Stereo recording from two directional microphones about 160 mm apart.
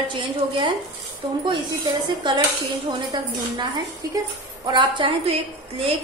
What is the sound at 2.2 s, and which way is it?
A woman's voice, 30° right (ahead or behind).